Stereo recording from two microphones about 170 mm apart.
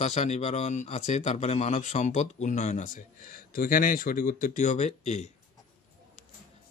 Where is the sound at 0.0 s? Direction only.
40° left (ahead or behind).